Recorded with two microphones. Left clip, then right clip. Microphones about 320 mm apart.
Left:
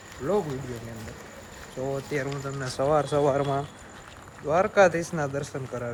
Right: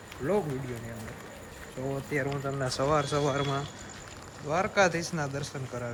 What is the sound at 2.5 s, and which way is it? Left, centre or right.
Speech, centre.